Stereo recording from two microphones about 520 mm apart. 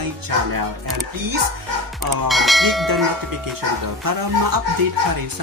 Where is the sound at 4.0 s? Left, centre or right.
Right.